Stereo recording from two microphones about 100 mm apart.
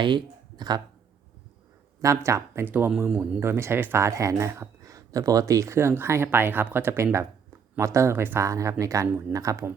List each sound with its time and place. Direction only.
0.0 s speech: 50° right (ahead or behind)
2.0 s speech: 30° right (ahead or behind)
2.7 s speech: 15° right (ahead or behind); by 9.7 s 30° right (ahead or behind)